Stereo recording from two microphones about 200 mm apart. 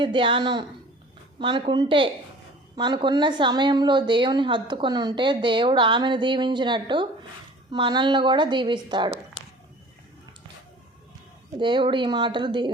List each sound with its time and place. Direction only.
0.0 s a woman's voice: 25° right (ahead or behind)
11.6 s a woman's voice: 25° right (ahead or behind)